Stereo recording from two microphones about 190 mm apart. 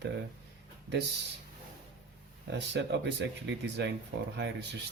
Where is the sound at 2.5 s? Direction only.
65° right (ahead or behind).